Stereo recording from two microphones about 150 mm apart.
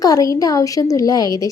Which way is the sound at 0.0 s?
25° left (ahead or behind).